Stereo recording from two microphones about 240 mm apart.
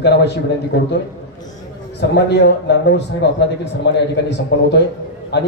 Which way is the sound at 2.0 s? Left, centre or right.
Left.